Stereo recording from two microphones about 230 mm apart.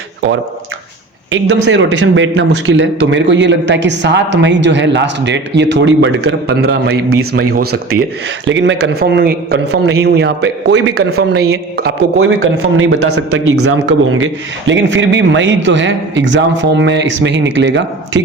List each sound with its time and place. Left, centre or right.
1.3 s a man's voice: right
8.4 s a man's voice: right
12.1 s a man's voice: right